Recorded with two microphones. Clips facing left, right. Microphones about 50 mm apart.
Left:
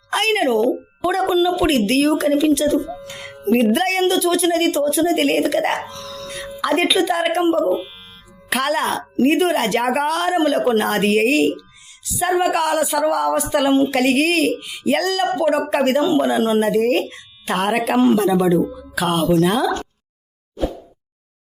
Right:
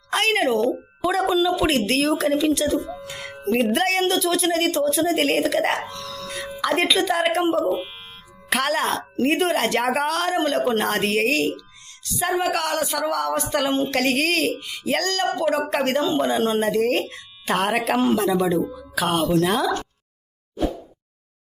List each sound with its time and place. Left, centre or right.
0.1 s speech: centre
5.9 s wail: centre
6.6 s speech: centre
20.6 s plop: centre